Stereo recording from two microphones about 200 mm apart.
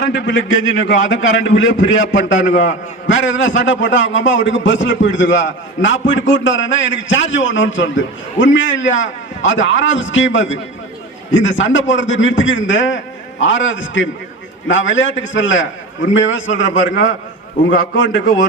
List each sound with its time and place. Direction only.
0.1 s a man's voice: 65° left (ahead or behind)
2.4 s a man's voice: 40° left (ahead or behind)
3.1 s a man's voice: 70° left (ahead or behind)